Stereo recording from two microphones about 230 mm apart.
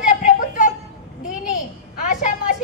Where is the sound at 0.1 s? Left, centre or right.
Left.